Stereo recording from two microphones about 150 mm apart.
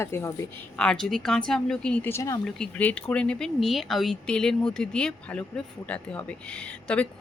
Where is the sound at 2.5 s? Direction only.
5° left (ahead or behind).